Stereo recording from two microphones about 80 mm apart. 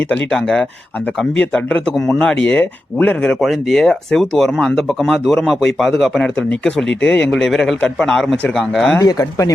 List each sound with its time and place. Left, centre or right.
0.3 s speech: centre
3.4 s a man's voice: centre
9.0 s speech: left